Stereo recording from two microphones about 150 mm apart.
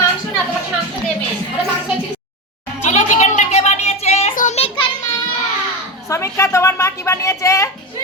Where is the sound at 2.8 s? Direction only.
50° left (ahead or behind).